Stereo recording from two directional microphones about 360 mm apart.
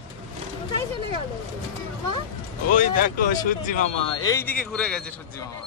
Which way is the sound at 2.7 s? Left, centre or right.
Left.